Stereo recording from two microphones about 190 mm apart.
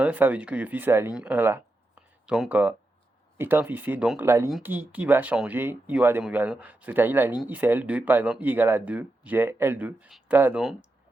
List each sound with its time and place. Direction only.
0.0 s speech: 10° right (ahead or behind)